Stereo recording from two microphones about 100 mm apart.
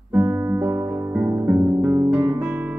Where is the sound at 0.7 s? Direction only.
20° right (ahead or behind).